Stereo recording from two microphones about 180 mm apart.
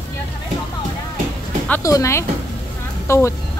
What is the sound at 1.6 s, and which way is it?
A woman's voice, 15° left (ahead or behind).